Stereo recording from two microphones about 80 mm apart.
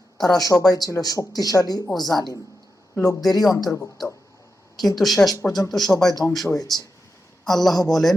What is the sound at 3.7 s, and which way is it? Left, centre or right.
Speech, left.